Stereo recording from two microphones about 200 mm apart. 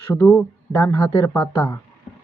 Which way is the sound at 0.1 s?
10° left (ahead or behind).